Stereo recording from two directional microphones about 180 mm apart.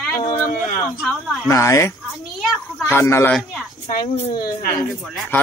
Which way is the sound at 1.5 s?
15° left (ahead or behind).